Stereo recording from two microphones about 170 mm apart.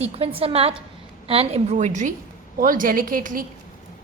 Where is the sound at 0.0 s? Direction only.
35° right (ahead or behind).